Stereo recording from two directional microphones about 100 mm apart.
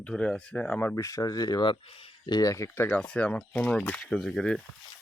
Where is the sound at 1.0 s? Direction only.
35° left (ahead or behind).